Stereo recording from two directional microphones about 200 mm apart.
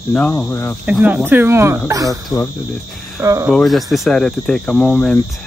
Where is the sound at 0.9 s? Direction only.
5° right (ahead or behind).